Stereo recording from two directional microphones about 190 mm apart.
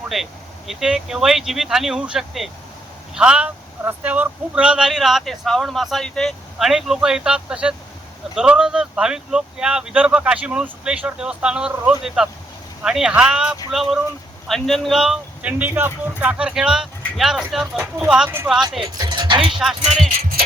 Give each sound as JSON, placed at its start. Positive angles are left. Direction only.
{"t": 0.1, "sound": "speech", "side_deg": 0}
{"t": 18.8, "sound": "speech", "side_deg": -20}